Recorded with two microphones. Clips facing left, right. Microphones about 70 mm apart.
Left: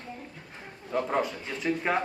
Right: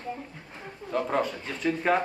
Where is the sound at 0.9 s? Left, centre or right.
Centre.